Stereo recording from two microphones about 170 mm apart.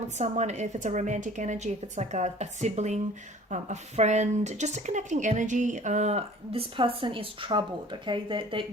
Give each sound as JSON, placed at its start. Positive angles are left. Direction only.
{"t": 0.2, "sound": "a woman's voice", "side_deg": -45}